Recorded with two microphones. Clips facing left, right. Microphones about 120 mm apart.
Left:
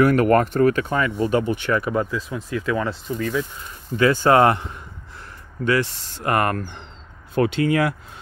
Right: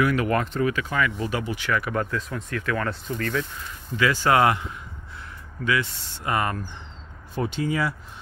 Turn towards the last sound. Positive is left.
turn(degrees=65)  # may be behind; listen again after turning